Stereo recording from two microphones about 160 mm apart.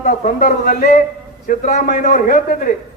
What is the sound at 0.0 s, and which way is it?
A man's voice, 55° left (ahead or behind).